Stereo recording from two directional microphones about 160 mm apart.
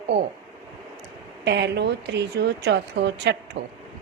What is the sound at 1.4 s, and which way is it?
A woman's voice, 90° right.